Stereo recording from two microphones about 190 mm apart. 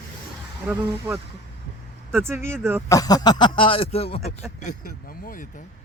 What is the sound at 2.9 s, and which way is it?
Speech, 20° left (ahead or behind).